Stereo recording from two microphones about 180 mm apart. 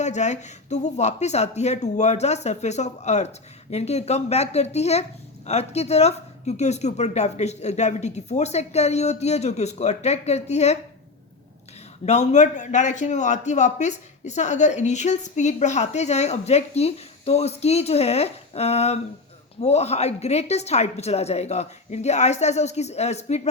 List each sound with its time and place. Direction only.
0.0 s a man's voice: 40° left (ahead or behind)
12.0 s a man's voice: 40° left (ahead or behind)